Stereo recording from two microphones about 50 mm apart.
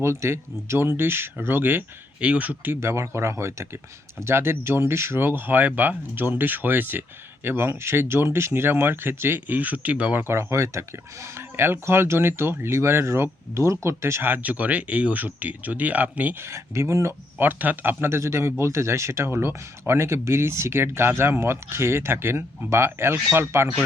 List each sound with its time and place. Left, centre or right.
0.0 s speech: right
2.2 s speech: right
2.8 s speech: right
4.2 s speech: right
7.4 s speech: right
9.5 s speech: right
10.3 s speech: right
13.8 s speech: right
14.2 s speech: right
16.5 s speech: right
17.3 s speech: right
18.0 s speech: right